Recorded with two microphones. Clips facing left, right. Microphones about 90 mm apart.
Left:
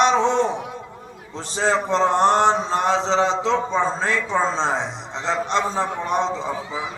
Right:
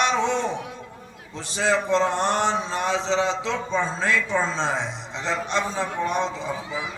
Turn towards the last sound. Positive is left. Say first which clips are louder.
# left 4 dB
turn(degrees=35)  # may be behind; listen again after turning